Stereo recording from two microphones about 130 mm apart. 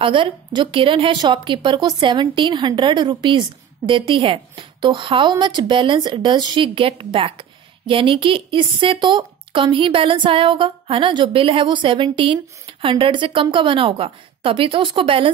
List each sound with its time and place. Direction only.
0.0 s a woman's voice: 40° right (ahead or behind)